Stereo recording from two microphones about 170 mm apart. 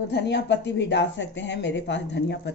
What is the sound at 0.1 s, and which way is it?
Speech, 90° left.